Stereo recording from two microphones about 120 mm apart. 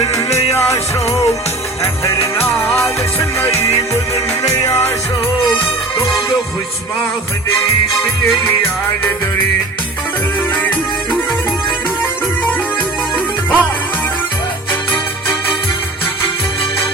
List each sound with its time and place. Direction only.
0.0 s music: 25° left (ahead or behind)
2.2 s music: 20° left (ahead or behind)
10.6 s music: 15° left (ahead or behind)
13.1 s music: 15° left (ahead or behind)